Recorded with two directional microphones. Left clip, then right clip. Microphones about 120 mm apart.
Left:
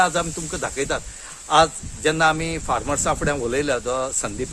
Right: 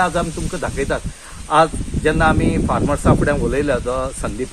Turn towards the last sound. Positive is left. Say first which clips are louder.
# right 2 dB
turn(degrees=35)  # may be behind; listen again after turning